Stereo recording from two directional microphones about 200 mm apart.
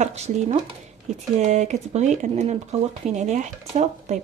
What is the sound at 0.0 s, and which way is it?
Speech, 35° right (ahead or behind).